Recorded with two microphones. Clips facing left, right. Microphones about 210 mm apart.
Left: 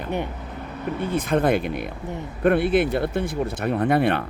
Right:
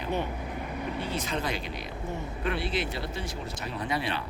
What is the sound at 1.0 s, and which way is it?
Speech, 55° left (ahead or behind).